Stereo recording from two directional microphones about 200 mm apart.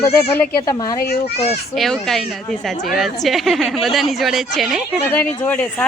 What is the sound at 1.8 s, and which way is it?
Speech, centre (ahead or behind).